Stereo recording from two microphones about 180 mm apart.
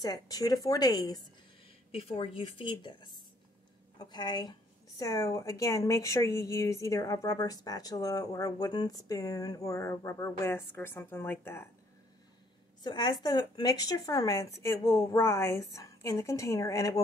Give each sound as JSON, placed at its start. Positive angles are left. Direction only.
{"t": 0.0, "sound": "a woman's voice", "side_deg": 20}
{"t": 1.9, "sound": "a woman's voice", "side_deg": 30}
{"t": 12.8, "sound": "a woman's voice", "side_deg": 25}